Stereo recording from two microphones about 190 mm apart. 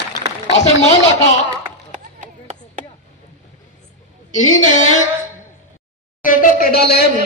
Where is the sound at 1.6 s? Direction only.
40° right (ahead or behind).